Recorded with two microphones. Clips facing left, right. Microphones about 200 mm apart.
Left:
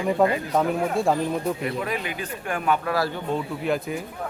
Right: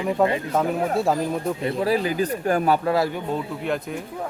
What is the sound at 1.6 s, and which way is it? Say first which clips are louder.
Speech: right 6 dB; 30° right (ahead or behind).